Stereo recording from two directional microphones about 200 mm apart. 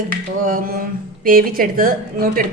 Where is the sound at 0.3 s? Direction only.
45° right (ahead or behind).